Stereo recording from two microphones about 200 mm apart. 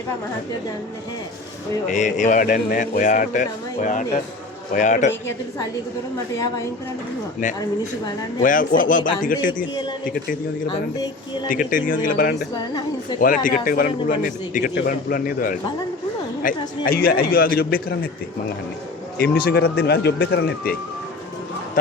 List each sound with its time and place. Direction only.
1.9 s speech: 35° left (ahead or behind)
8.4 s speech: 40° left (ahead or behind)
11.4 s a man's voice: 45° left (ahead or behind)
12.5 s speech: 20° left (ahead or behind)
13.1 s a man's voice: 45° left (ahead or behind)
19.2 s a man's voice: 50° left (ahead or behind)